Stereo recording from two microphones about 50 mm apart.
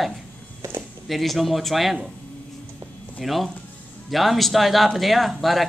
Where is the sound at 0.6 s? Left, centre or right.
Right.